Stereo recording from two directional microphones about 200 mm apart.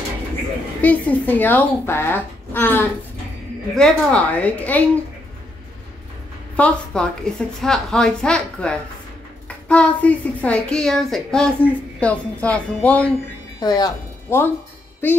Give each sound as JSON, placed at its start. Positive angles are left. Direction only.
{"t": 0.8, "sound": "speech", "side_deg": 10}
{"t": 6.5, "sound": "a woman's voice", "side_deg": 5}
{"t": 13.6, "sound": "speech", "side_deg": 20}